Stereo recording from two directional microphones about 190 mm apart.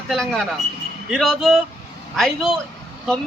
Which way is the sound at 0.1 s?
Centre (ahead or behind).